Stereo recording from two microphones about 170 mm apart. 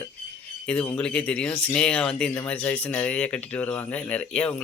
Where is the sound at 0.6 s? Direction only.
5° left (ahead or behind).